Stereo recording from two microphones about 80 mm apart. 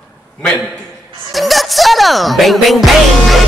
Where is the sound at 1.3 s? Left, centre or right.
Centre.